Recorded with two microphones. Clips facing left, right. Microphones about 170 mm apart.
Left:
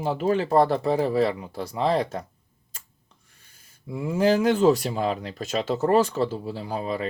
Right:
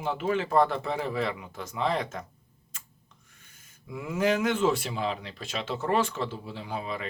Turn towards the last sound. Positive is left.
turn(degrees=40)  # may be behind; listen again after turning